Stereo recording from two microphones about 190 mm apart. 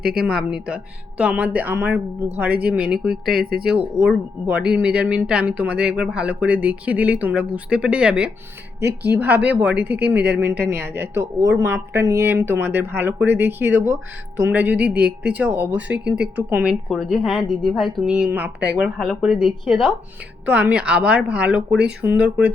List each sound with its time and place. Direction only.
0.0 s speech: 55° right (ahead or behind)
0.3 s speech: 5° right (ahead or behind)
3.3 s speech: 55° right (ahead or behind)
4.4 s speech: 5° right (ahead or behind)
8.8 s speech: 60° right (ahead or behind)
9.1 s speech: 10° right (ahead or behind)
14.9 s speech: 55° right (ahead or behind)
15.3 s speech: 10° right (ahead or behind)
16.1 s speech: 60° right (ahead or behind)
16.5 s speech: 10° right (ahead or behind)